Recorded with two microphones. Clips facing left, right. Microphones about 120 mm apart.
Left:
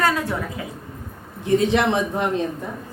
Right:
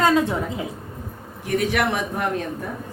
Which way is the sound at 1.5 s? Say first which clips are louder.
Left 4 dB; 25° left (ahead or behind).